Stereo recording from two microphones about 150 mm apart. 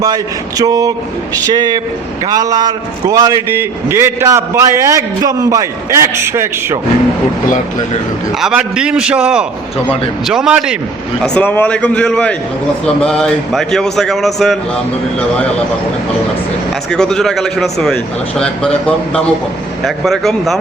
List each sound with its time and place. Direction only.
0.0 s a man's voice: 25° right (ahead or behind)
8.4 s a man's voice: 5° right (ahead or behind)
11.2 s a man's voice: 10° left (ahead or behind)
16.9 s a man's voice: 5° left (ahead or behind)